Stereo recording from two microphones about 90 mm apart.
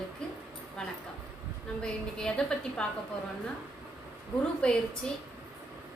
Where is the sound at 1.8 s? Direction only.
10° left (ahead or behind).